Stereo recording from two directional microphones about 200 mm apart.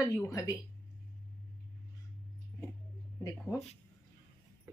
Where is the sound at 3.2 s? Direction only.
15° left (ahead or behind).